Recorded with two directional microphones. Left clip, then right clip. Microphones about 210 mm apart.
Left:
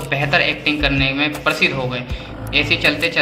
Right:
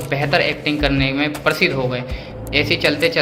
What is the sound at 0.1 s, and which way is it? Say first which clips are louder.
Speech: left 1 dB; 25° right (ahead or behind).